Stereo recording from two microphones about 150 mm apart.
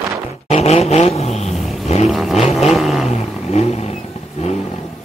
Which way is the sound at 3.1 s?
45° left (ahead or behind).